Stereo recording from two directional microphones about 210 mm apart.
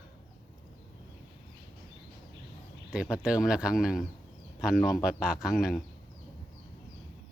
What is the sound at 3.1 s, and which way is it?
Speech, 5° right (ahead or behind).